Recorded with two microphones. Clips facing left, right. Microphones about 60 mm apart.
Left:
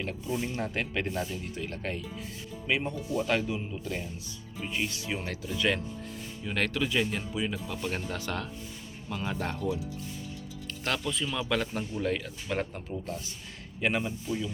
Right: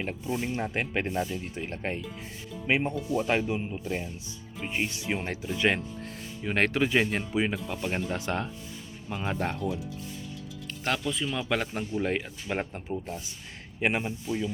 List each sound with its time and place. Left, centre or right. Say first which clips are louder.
0.0 s speech: right 1 dB; right
7.9 s speech: right 4 dB; right
10.8 s speech: right 2 dB; centre; by 14.1 s right